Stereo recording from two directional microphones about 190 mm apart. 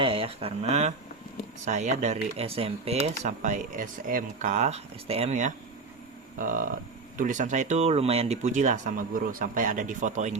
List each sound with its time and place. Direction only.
0.0 s speech: 30° right (ahead or behind)
6.4 s a sound: 45° right (ahead or behind)
7.2 s speech: 40° right (ahead or behind)